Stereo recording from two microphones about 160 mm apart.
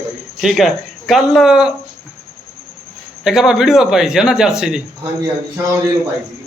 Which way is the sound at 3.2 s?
5° right (ahead or behind).